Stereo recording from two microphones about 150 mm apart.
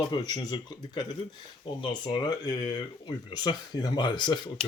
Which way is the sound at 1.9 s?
30° left (ahead or behind).